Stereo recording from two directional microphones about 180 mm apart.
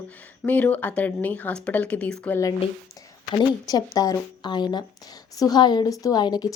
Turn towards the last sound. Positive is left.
turn(degrees=20)  # may be behind; listen again after turning